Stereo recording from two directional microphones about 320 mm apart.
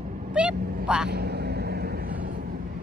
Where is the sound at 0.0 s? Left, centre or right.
Right.